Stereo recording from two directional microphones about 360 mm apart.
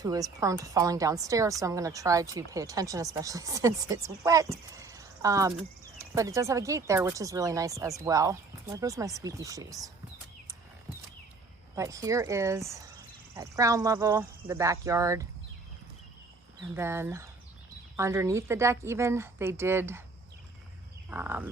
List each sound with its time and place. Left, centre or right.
0.0 s a woman's voice: centre
11.7 s a woman's voice: centre
16.7 s a woman's voice: centre
21.1 s a sound: centre